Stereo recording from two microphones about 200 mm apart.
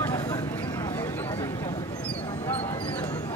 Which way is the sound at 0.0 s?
15° left (ahead or behind).